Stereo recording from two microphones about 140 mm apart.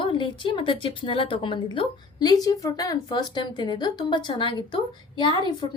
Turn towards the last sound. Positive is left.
turn(degrees=30)  # may be behind; listen again after turning